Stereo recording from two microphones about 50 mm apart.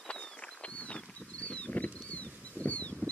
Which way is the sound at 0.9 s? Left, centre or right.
Left.